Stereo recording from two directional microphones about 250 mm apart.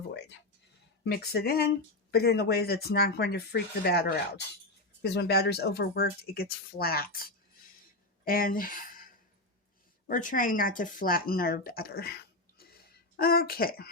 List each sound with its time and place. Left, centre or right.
1.0 s speech: left
10.1 s speech: left